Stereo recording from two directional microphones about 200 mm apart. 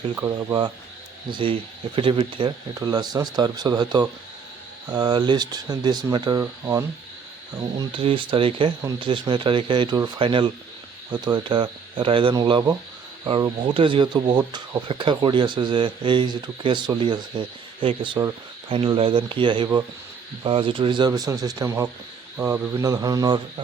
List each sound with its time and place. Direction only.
0.2 s speech: 20° right (ahead or behind)